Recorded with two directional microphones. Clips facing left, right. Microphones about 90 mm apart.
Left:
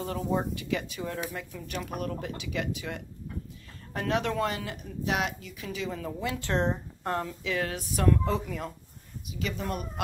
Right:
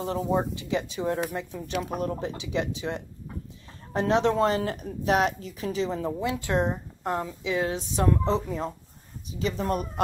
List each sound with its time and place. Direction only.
0.0 s speech: 25° right (ahead or behind)